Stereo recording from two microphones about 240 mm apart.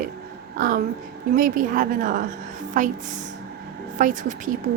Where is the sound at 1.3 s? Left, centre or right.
Right.